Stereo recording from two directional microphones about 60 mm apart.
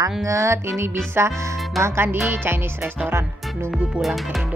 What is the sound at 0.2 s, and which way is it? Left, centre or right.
Music, right.